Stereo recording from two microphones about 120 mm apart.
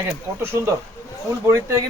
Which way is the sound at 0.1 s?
20° right (ahead or behind).